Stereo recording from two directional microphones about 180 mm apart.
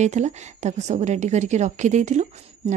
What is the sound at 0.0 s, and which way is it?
A woman's voice, 40° right (ahead or behind).